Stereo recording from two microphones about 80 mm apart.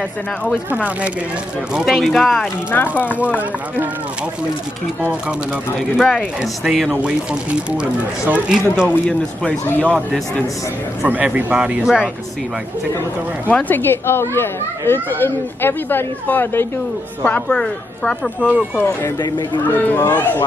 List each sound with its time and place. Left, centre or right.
0.7 s speech: centre
1.9 s speech: centre
2.7 s speech: left
3.2 s speech: centre
5.8 s speech: centre
8.3 s speech: centre
9.0 s a woman's voice: centre
9.7 s speech: left
11.0 s speech: centre
13.5 s speech: centre
17.6 s a woman's voice: centre
18.4 s speech: centre
19.1 s speech: left
19.6 s speech: left